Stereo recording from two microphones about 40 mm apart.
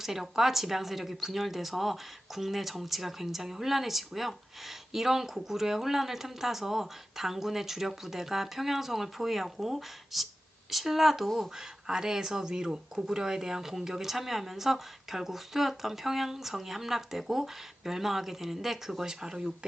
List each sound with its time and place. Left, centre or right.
0.0 s speech: centre
11.5 s speech: centre